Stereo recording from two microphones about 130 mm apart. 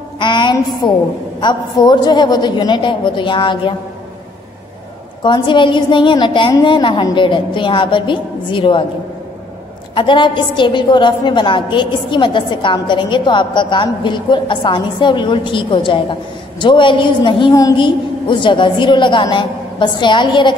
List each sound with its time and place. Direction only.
0.2 s a woman's voice: 35° left (ahead or behind)
5.2 s a woman's voice: 35° left (ahead or behind)
9.9 s a woman's voice: 40° left (ahead or behind)